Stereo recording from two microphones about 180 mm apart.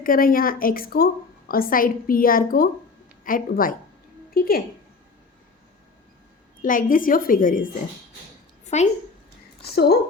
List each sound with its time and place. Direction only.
0.0 s a woman's voice: 50° left (ahead or behind)
6.6 s a woman's voice: 50° left (ahead or behind)
8.7 s a woman's voice: 40° left (ahead or behind)
9.6 s a woman's voice: 60° left (ahead or behind)